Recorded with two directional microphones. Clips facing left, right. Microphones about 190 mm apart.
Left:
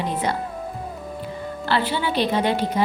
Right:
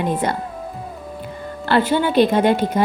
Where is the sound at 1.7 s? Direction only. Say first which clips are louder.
Right 6 dB; 50° right (ahead or behind).